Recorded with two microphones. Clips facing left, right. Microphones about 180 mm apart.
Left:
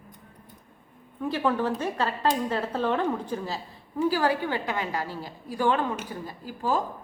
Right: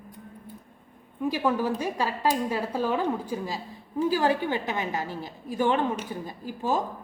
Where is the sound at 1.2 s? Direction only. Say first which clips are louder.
Even; 10° right (ahead or behind).